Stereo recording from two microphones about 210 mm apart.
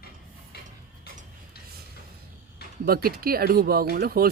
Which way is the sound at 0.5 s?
50° left (ahead or behind).